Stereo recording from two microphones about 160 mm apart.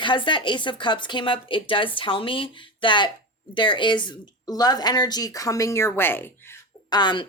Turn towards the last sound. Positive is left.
turn(degrees=30)  # may be behind; listen again after turning